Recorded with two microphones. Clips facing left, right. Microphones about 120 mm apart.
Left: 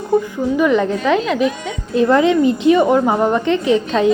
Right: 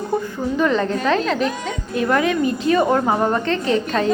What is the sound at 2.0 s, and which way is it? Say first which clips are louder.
A woman's voice: left 6 dB; 25° left (ahead or behind).